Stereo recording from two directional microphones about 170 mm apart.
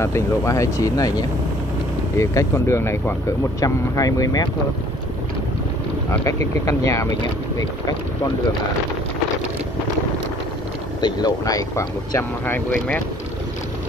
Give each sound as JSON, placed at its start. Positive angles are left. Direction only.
{"t": 0.0, "sound": "speech", "side_deg": 15}
{"t": 6.2, "sound": "speech", "side_deg": 20}
{"t": 11.0, "sound": "speech", "side_deg": 25}